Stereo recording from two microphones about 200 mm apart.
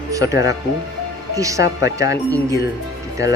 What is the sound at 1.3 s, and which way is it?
Speech, 15° right (ahead or behind).